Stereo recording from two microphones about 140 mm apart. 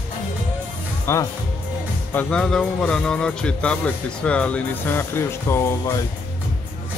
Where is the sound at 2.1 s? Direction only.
5° left (ahead or behind).